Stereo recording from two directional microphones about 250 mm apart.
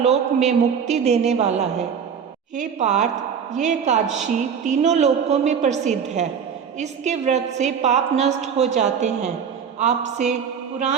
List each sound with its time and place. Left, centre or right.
0.0 s a woman's voice: right